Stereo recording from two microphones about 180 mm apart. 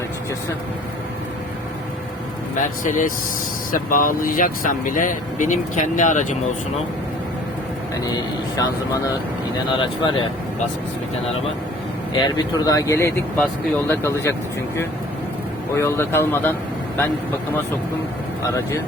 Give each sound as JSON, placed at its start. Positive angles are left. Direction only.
{"t": 2.6, "sound": "speech", "side_deg": 45}
{"t": 8.5, "sound": "speech", "side_deg": 20}
{"t": 12.1, "sound": "speech", "side_deg": 25}
{"t": 15.7, "sound": "speech", "side_deg": 15}